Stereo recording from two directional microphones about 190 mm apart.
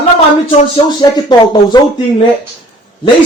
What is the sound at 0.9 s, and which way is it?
Speech, 20° left (ahead or behind).